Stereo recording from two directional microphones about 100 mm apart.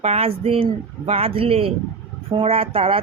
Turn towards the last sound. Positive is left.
turn(degrees=-70)  # may be behind; listen again after turning